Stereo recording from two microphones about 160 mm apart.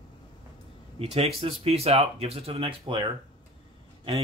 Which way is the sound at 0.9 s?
40° right (ahead or behind).